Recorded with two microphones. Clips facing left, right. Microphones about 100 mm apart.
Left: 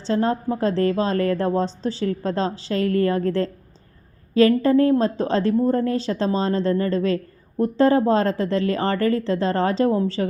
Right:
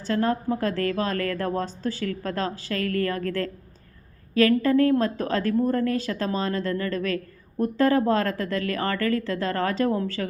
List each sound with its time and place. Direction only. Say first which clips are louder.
0.0 s a woman's voice: left 3 dB; 25° left (ahead or behind)